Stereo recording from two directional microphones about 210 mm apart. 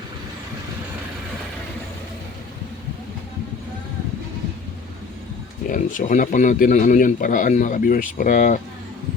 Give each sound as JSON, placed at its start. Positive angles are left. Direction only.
{"t": 5.6, "sound": "speech", "side_deg": 40}